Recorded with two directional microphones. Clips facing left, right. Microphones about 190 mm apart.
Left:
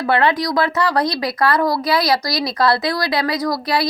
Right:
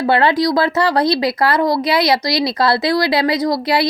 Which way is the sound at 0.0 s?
30° right (ahead or behind).